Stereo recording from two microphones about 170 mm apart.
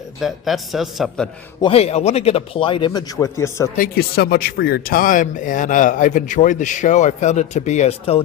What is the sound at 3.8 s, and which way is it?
Speech, 65° left (ahead or behind).